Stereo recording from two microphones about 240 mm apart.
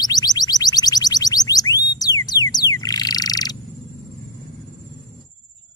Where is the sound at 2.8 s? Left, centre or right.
Centre.